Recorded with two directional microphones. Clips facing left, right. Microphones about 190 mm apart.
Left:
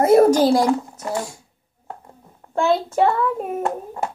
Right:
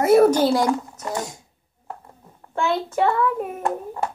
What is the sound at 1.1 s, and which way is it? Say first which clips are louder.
Speech: left 2 dB; 20° right (ahead or behind).